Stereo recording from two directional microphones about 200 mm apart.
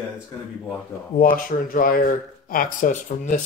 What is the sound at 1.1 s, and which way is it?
Speech, 45° left (ahead or behind).